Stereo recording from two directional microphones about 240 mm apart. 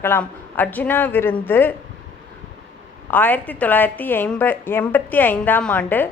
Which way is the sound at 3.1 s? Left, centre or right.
Centre.